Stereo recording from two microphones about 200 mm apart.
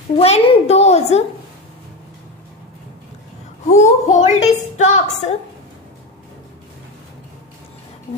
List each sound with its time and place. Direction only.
0.2 s a woman's voice: 30° left (ahead or behind)
3.6 s a woman's voice: 35° left (ahead or behind)